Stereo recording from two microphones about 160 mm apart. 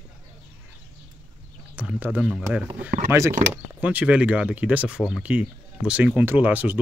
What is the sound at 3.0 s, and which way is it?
Speech, 15° right (ahead or behind).